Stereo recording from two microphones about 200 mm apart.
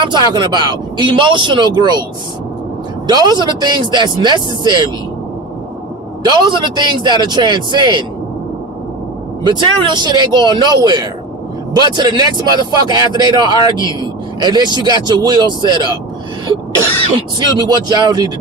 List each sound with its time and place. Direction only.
0.0 s speech: 20° right (ahead or behind)
3.1 s speech: 20° right (ahead or behind)
6.2 s speech: 20° right (ahead or behind)
9.4 s speech: 20° right (ahead or behind)
17.4 s speech: 20° right (ahead or behind)